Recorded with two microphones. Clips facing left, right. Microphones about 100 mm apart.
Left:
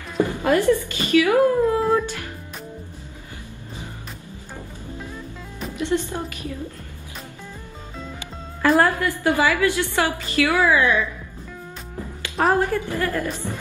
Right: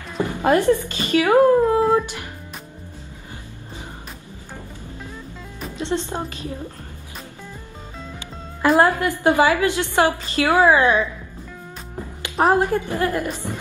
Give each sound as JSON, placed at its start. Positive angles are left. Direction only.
{"t": 0.5, "sound": "a woman's voice", "side_deg": -20}
{"t": 1.8, "sound": "music", "side_deg": -15}
{"t": 5.8, "sound": "a woman's voice", "side_deg": -20}
{"t": 8.6, "sound": "a woman's voice", "side_deg": -20}
{"t": 12.2, "sound": "a woman's voice", "side_deg": -25}